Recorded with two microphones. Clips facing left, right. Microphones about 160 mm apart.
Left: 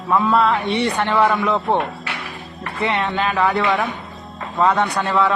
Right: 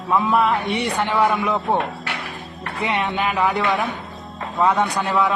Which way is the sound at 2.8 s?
15° right (ahead or behind).